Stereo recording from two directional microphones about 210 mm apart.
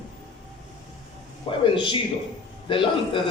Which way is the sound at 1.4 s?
25° left (ahead or behind).